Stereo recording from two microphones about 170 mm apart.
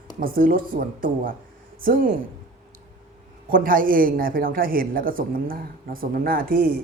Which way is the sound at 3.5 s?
55° right (ahead or behind).